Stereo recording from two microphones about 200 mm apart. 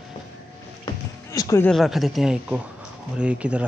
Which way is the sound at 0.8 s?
20° left (ahead or behind).